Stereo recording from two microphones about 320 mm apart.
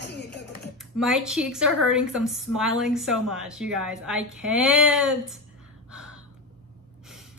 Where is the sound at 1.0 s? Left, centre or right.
Centre.